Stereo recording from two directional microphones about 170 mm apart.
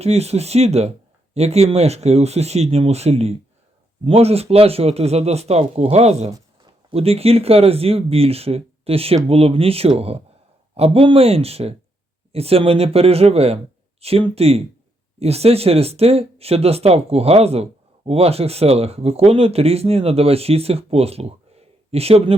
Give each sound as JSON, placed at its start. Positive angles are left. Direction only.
{"t": 0.0, "sound": "speech", "side_deg": -40}